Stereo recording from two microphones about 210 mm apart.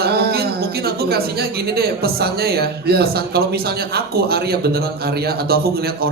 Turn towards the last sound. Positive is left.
turn(degrees=-50)  # may be behind; listen again after turning